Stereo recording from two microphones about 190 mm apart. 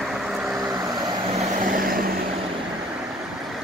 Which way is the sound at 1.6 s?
50° right (ahead or behind).